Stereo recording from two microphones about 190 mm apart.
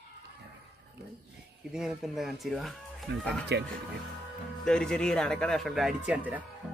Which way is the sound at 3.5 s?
60° right (ahead or behind).